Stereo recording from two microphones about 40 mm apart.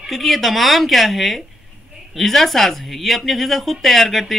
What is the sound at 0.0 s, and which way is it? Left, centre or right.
Speech, centre.